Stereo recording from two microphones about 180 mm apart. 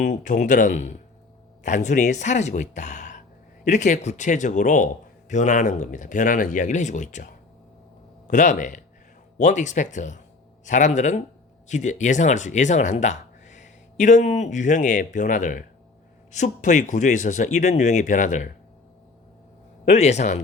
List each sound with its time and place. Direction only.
0.0 s speech: 45° left (ahead or behind)
19.8 s speech: 40° left (ahead or behind)